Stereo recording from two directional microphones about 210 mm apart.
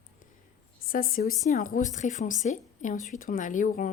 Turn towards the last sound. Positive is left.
turn(degrees=40)  # may be behind; listen again after turning